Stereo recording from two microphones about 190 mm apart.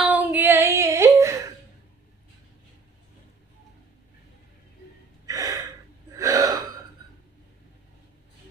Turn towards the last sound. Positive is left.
turn(degrees=-15)  # may be behind; listen again after turning